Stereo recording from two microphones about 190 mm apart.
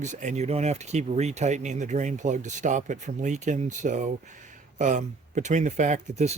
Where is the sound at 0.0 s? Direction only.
40° right (ahead or behind).